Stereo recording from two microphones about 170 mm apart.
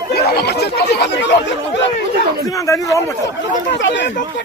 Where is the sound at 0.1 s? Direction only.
70° left (ahead or behind).